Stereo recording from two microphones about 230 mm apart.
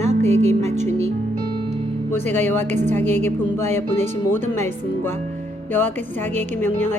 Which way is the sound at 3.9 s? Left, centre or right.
Centre.